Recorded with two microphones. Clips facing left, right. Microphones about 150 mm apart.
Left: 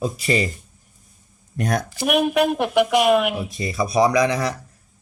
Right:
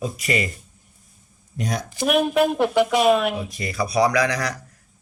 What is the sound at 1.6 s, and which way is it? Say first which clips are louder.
Speech: left 4 dB; 55° left (ahead or behind).